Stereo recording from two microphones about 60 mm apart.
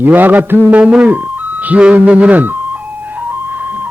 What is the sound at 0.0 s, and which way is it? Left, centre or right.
Mantra, right.